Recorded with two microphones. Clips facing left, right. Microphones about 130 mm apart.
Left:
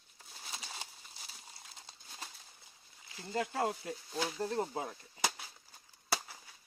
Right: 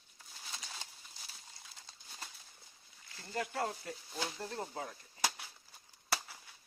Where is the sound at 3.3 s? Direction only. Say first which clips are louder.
Left 3 dB; 25° left (ahead or behind).